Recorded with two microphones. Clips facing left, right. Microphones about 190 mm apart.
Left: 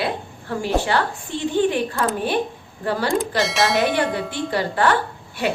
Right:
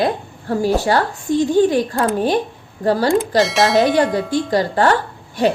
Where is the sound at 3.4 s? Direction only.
Centre (ahead or behind).